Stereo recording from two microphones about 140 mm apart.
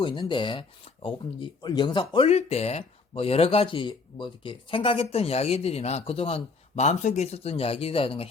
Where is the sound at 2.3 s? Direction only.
50° left (ahead or behind).